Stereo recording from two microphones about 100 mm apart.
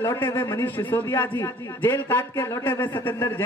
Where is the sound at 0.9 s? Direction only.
20° left (ahead or behind).